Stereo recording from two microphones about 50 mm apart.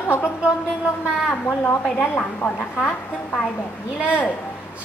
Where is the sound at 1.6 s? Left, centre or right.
Left.